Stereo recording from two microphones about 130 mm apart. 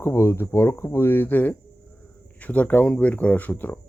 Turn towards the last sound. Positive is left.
turn(degrees=15)  # may be behind; listen again after turning